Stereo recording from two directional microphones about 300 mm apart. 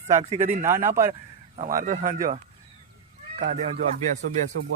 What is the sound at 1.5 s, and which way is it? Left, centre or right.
Speech, right.